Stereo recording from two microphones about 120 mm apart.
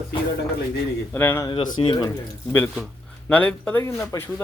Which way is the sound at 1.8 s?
35° left (ahead or behind).